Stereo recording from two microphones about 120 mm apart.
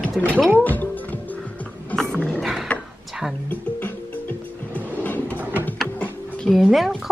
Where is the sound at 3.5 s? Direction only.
15° left (ahead or behind).